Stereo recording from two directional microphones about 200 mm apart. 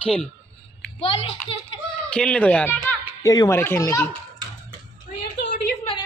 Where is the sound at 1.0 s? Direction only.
30° left (ahead or behind).